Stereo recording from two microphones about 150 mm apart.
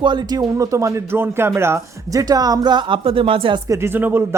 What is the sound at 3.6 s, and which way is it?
Speech, 20° right (ahead or behind).